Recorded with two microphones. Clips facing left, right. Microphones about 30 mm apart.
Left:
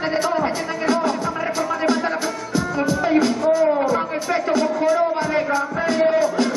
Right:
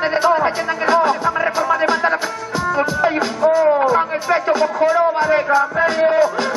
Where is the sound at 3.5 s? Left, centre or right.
Centre.